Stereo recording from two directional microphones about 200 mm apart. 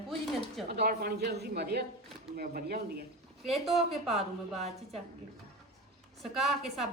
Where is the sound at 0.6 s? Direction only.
55° right (ahead or behind).